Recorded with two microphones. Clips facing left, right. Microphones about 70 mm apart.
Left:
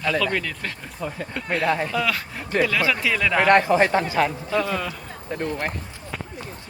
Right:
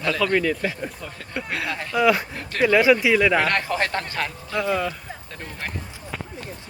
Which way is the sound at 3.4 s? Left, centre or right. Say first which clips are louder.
Left 7 dB; left.